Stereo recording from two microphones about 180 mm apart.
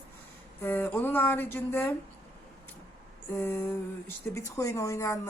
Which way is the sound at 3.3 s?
10° left (ahead or behind).